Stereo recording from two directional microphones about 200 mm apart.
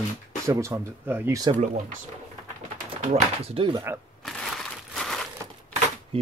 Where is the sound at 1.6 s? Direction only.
35° right (ahead or behind).